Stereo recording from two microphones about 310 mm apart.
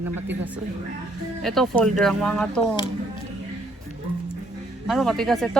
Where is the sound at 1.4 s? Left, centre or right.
Centre.